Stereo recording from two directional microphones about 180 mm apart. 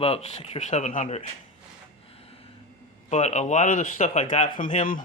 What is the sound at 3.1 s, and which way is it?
Speech, 40° left (ahead or behind).